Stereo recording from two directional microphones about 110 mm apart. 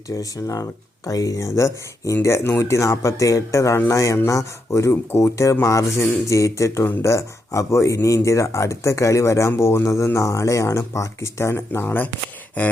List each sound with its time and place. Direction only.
0.1 s speech: 30° left (ahead or behind)